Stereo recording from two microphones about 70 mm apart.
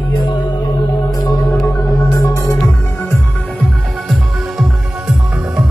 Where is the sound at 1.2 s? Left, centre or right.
Left.